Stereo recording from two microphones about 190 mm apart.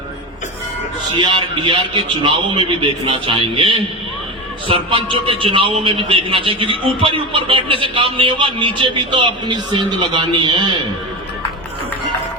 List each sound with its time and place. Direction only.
1.2 s a man's voice: 25° right (ahead or behind)